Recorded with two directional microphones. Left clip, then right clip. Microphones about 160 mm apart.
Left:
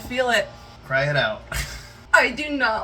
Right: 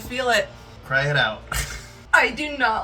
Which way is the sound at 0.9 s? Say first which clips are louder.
Right 1 dB; 10° left (ahead or behind).